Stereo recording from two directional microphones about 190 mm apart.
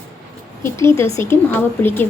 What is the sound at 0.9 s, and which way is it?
Speech, 15° left (ahead or behind).